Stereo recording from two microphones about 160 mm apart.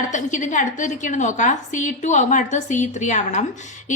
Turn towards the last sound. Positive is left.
turn(degrees=50)  # may be behind; listen again after turning